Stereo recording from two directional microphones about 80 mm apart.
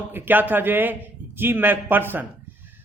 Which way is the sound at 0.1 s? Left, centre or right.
Right.